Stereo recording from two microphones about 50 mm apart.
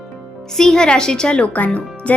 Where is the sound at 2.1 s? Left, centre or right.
Left.